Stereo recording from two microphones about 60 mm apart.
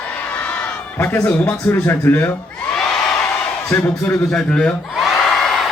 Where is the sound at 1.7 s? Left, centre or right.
Left.